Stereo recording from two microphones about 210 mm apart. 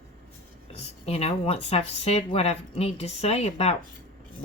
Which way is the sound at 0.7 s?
30° left (ahead or behind).